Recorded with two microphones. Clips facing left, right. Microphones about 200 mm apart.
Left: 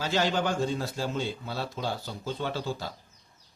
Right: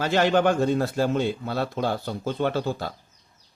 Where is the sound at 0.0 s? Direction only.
60° right (ahead or behind).